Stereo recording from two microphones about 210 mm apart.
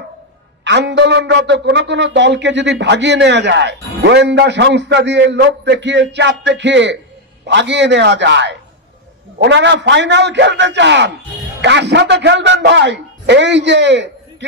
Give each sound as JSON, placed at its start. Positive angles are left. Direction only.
{"t": 0.7, "sound": "a man's voice", "side_deg": -55}